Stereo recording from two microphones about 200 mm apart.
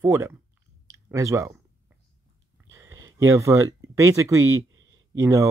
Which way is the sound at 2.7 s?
15° right (ahead or behind).